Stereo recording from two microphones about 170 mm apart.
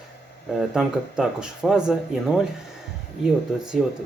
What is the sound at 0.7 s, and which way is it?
Speech, 5° right (ahead or behind).